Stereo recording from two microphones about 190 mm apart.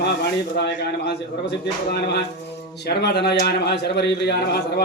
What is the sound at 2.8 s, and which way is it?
Speech, 60° left (ahead or behind).